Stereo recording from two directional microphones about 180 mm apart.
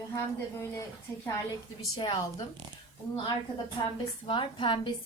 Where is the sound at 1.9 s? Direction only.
30° left (ahead or behind).